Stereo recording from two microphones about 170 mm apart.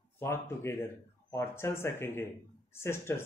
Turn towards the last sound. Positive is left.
turn(degrees=15)  # may be behind; listen again after turning